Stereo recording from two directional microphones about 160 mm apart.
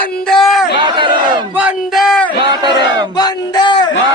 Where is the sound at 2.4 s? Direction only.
30° right (ahead or behind).